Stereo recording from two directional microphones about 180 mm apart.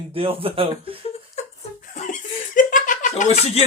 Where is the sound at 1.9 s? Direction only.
45° left (ahead or behind).